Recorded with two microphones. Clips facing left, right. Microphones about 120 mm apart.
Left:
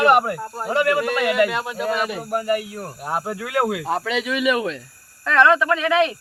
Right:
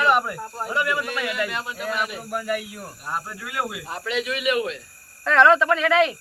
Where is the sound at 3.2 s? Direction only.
85° left.